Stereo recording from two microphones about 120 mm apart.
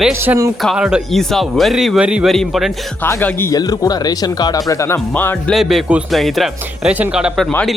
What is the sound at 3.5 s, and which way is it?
Speech, 30° left (ahead or behind).